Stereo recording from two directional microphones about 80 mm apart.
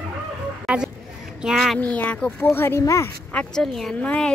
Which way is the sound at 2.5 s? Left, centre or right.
Left.